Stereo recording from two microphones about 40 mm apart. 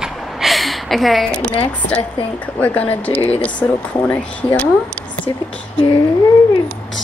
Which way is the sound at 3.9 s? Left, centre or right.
Left.